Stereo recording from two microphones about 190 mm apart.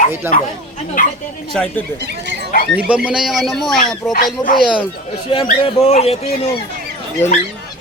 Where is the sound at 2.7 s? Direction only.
5° right (ahead or behind).